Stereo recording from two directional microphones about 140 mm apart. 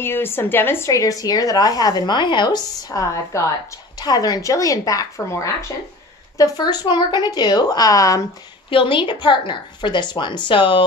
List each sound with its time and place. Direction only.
0.0 s a woman's voice: 15° left (ahead or behind)
8.6 s a woman's voice: 35° left (ahead or behind)